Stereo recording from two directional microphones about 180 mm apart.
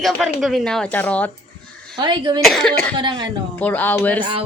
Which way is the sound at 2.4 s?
Centre (ahead or behind).